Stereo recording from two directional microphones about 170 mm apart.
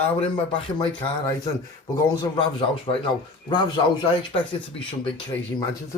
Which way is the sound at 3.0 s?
25° left (ahead or behind).